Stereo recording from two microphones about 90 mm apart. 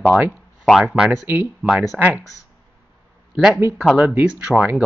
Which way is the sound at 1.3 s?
25° right (ahead or behind).